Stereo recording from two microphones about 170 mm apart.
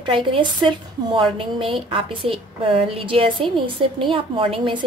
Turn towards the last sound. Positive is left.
turn(degrees=-30)  # may be behind; listen again after turning